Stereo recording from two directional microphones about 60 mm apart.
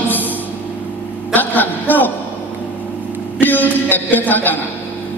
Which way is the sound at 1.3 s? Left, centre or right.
Left.